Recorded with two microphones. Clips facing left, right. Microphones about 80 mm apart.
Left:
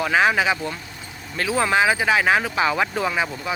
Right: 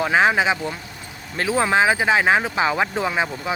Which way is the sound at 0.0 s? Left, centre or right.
Right.